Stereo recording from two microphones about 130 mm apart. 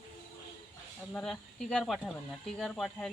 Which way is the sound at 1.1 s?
5° left (ahead or behind).